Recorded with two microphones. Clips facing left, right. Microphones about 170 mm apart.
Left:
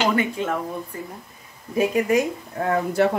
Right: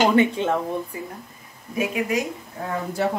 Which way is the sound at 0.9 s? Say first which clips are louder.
Right 1 dB; 10° right (ahead or behind).